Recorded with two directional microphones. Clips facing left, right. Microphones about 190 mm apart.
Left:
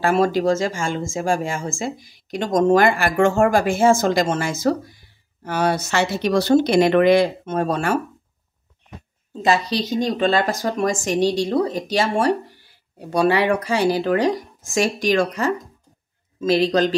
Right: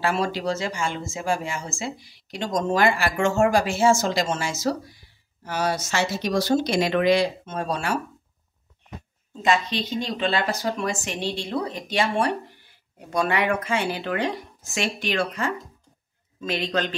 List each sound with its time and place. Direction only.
0.0 s speech: 45° left (ahead or behind)
9.4 s speech: 35° left (ahead or behind)